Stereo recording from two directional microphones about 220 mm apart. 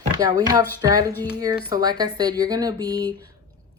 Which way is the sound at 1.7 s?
20° right (ahead or behind).